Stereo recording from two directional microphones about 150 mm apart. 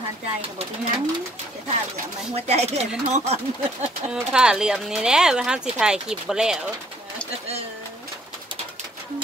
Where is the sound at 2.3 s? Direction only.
45° right (ahead or behind).